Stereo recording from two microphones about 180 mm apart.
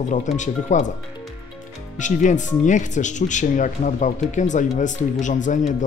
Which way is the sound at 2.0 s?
45° left (ahead or behind).